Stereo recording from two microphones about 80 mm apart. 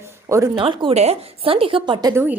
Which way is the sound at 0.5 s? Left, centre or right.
Right.